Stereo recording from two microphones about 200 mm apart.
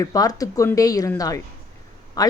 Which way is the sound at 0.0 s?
20° left (ahead or behind).